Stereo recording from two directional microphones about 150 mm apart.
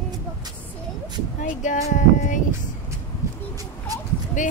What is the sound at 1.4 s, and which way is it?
Speech, 60° left (ahead or behind).